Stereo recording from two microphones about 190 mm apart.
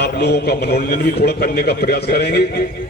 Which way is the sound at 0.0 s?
60° left (ahead or behind).